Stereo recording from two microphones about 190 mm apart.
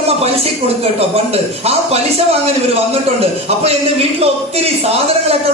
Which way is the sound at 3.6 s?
35° right (ahead or behind).